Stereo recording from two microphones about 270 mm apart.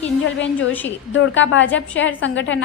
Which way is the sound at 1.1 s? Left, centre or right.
Left.